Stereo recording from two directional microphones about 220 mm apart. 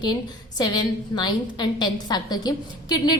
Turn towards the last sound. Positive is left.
turn(degrees=20)  # may be behind; listen again after turning